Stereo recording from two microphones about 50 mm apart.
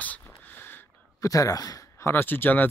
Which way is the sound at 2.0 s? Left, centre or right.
Left.